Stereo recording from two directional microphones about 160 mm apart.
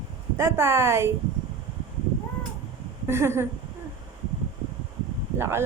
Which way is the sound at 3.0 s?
15° right (ahead or behind).